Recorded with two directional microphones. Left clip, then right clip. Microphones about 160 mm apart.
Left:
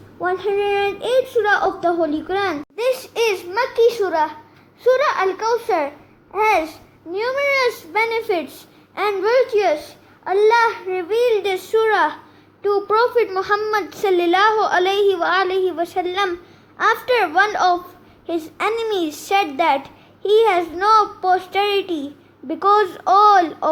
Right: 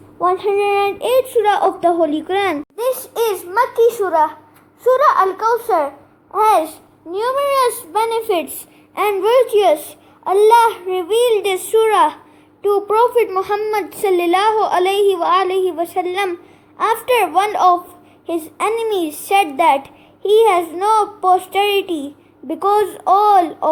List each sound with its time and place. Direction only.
0.2 s a woman's voice: 20° right (ahead or behind)
2.7 s a child's voice: 5° right (ahead or behind)
5.0 s a child's voice: 10° left (ahead or behind)
6.3 s a child's voice: 10° right (ahead or behind); by 9.4 s 25° right (ahead or behind)
10.5 s a woman's voice: 20° right (ahead or behind)